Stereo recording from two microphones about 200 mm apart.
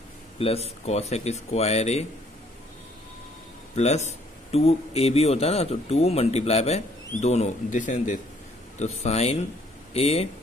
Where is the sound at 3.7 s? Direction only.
35° left (ahead or behind).